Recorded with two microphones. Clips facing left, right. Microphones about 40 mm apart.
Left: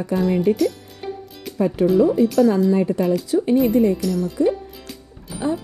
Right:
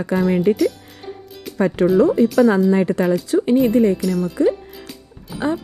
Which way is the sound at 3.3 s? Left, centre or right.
Right.